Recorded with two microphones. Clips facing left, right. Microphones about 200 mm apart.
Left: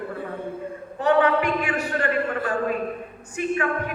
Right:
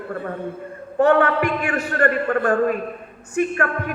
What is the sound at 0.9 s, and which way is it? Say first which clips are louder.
A man's voice: right 3 dB; 50° right (ahead or behind).